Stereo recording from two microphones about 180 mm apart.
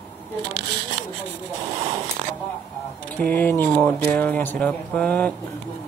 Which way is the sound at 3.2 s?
10° left (ahead or behind).